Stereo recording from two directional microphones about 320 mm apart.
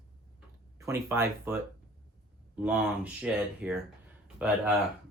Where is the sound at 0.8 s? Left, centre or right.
Centre.